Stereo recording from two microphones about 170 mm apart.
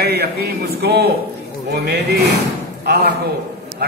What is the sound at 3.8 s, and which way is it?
Speech, 70° right (ahead or behind).